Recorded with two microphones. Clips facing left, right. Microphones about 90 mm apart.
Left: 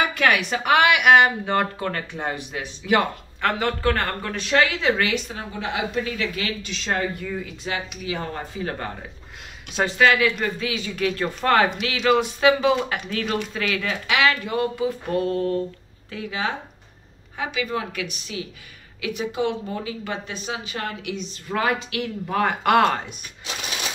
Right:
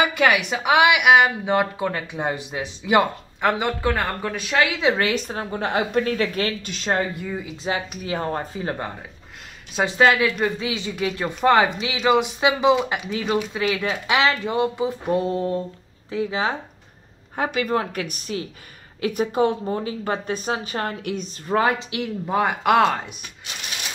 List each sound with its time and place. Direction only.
0.0 s speech: 10° right (ahead or behind)
4.9 s a woman's voice: 40° right (ahead or behind)
7.0 s speech: 15° right (ahead or behind)
7.6 s a woman's voice: 35° right (ahead or behind)
8.6 s speech: 15° right (ahead or behind)
9.9 s speech: 25° right (ahead or behind)
12.7 s speech: 5° right (ahead or behind); by 16.5 s 30° right (ahead or behind)
17.4 s a woman's voice: 45° right (ahead or behind)
21.9 s speech: 20° right (ahead or behind)
22.5 s speech: 5° right (ahead or behind)